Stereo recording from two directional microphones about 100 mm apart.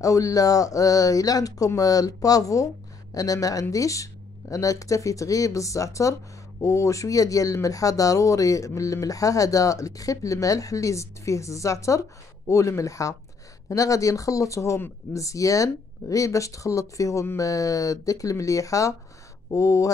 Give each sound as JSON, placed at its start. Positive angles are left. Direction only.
{"t": 0.0, "sound": "speech", "side_deg": 35}